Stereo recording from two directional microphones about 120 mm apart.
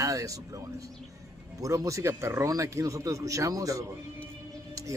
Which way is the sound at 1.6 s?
25° right (ahead or behind).